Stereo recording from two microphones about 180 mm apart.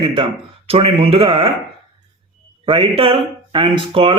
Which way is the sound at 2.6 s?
30° right (ahead or behind).